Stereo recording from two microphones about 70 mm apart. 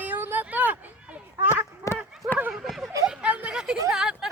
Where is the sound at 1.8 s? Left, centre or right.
Left.